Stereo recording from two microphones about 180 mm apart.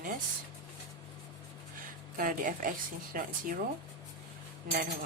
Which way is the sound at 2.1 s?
50° right (ahead or behind).